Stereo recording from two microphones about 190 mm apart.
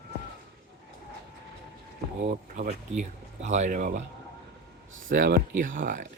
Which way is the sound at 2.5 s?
40° right (ahead or behind).